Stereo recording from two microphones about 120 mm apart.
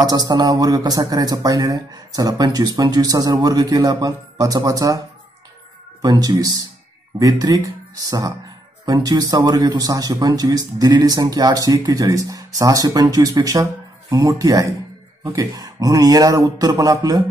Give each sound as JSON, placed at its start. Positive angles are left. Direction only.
{"t": 0.0, "sound": "a man's voice", "side_deg": -35}
{"t": 6.0, "sound": "a man's voice", "side_deg": -30}